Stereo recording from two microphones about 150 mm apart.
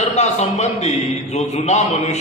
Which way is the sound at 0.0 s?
50° left (ahead or behind).